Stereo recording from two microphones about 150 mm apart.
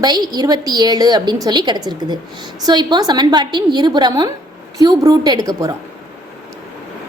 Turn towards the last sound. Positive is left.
turn(degrees=-25)  # may be behind; listen again after turning